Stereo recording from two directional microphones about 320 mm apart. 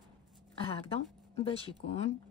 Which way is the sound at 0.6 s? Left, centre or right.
Centre.